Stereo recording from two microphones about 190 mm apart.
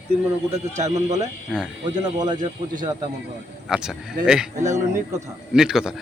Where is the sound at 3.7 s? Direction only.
5° right (ahead or behind).